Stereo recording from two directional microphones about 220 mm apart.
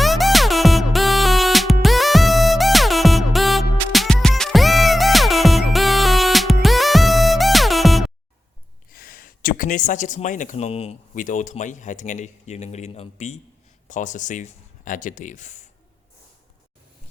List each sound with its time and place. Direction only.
0.0 s music: centre (ahead or behind)
8.9 s speech: 40° left (ahead or behind)